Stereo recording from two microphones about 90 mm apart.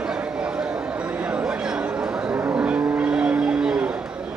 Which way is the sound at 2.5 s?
15° right (ahead or behind).